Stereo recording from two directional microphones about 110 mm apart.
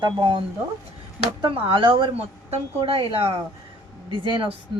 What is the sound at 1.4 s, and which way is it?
A woman's voice, 50° right (ahead or behind).